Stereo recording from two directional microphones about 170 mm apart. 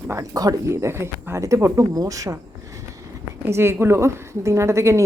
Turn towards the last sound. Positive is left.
turn(degrees=-15)  # may be behind; listen again after turning